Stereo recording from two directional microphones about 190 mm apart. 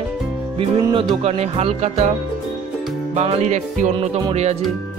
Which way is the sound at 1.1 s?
30° right (ahead or behind).